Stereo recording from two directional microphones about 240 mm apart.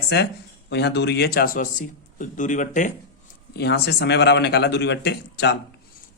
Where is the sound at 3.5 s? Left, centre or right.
Left.